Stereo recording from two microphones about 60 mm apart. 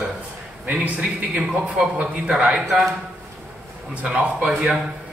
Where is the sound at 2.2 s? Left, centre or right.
Centre.